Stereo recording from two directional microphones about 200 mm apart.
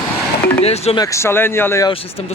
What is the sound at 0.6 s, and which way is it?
Speech, 30° left (ahead or behind).